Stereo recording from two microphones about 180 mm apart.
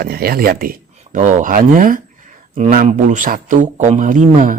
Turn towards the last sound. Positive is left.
turn(degrees=-45)  # may be behind; listen again after turning